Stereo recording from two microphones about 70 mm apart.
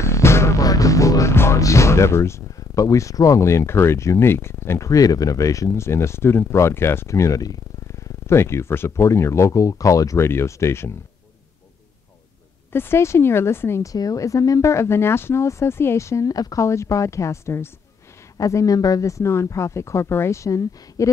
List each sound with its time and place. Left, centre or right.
0.0 s music: left
0.6 s music: left
1.3 s music: left
1.6 s speech: left
8.3 s speech: left
9.5 s speech: left
10.2 s speech: left
12.7 s speech: left
13.8 s speech: left
16.6 s speech: left
18.4 s speech: left